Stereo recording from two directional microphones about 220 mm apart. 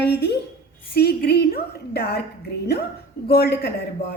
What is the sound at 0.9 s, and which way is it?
A woman's voice, 45° left (ahead or behind).